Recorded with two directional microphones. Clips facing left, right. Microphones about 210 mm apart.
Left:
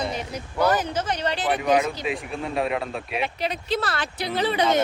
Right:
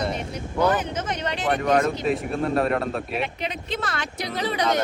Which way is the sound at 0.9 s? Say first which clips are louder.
Left 2 dB; 35° left (ahead or behind).